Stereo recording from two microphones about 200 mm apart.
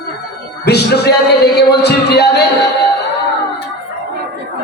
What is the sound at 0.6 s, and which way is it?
Speech, 55° left (ahead or behind).